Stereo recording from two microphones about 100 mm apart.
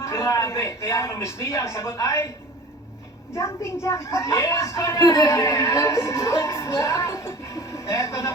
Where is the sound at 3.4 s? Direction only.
25° left (ahead or behind).